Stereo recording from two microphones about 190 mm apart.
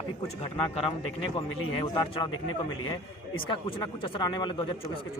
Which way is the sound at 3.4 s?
25° left (ahead or behind).